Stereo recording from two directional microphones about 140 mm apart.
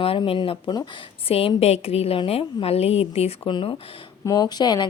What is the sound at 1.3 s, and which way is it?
A woman's voice, 45° left (ahead or behind).